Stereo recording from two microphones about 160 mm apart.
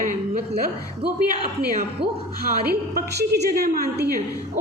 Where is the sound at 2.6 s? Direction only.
70° right (ahead or behind).